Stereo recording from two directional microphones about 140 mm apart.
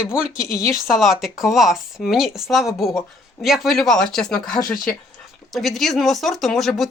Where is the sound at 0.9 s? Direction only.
Centre (ahead or behind).